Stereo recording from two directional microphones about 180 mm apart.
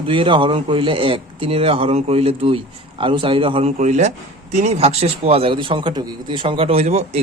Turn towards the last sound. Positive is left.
turn(degrees=-35)  # may be behind; listen again after turning